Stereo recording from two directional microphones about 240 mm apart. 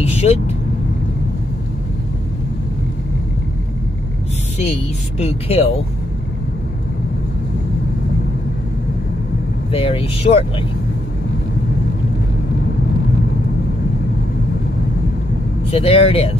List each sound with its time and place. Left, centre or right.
0.0 s vehicle: left
5.2 s speech: left
9.7 s speech: left
15.7 s speech: left